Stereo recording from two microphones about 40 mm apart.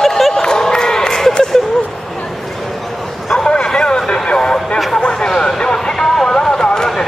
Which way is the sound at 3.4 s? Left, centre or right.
Centre.